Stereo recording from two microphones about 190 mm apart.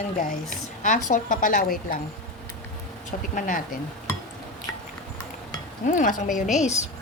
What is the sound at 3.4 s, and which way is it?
Speech, 45° left (ahead or behind).